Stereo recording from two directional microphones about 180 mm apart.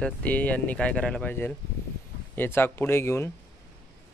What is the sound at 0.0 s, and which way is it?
Speech, 10° left (ahead or behind).